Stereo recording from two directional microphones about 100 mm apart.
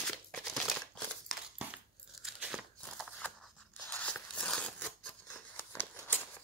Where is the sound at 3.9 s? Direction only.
10° left (ahead or behind).